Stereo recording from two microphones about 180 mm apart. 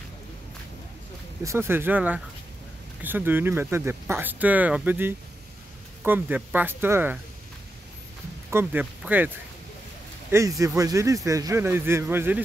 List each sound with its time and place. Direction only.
1.4 s a man's voice: 15° right (ahead or behind)
8.5 s a man's voice: 10° right (ahead or behind)
10.3 s a man's voice: 15° right (ahead or behind)